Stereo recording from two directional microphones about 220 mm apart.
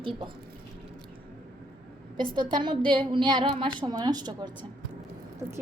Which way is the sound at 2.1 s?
20° right (ahead or behind).